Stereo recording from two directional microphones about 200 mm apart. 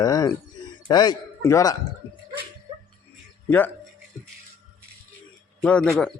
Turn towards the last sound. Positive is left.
turn(degrees=5)  # may be behind; listen again after turning